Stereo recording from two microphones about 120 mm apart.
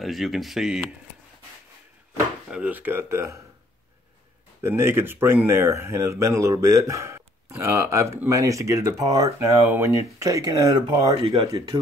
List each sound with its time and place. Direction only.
0.0 s speech: centre (ahead or behind)
2.5 s speech: 15° right (ahead or behind)
4.6 s speech: 20° right (ahead or behind)